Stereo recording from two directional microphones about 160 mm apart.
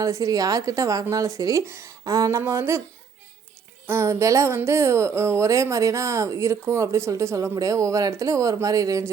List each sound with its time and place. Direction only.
0.0 s speech: 20° right (ahead or behind)
3.8 s speech: 15° right (ahead or behind)